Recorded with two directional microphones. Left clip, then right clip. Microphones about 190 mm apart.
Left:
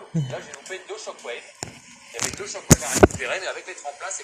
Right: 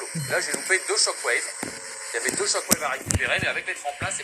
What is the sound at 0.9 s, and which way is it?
Speech, 35° right (ahead or behind).